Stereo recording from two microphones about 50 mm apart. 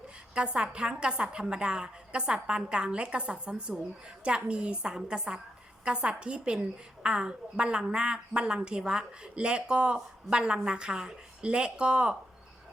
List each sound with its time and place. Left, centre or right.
0.3 s a woman's voice: centre